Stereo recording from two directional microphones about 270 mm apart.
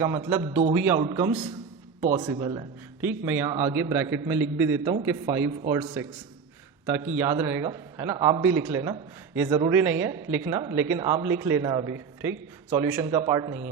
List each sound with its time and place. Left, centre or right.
0.0 s a man's voice: centre
5.9 s a man's voice: centre